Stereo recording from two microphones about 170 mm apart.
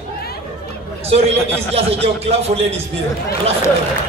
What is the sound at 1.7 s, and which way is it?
Speech, 35° right (ahead or behind).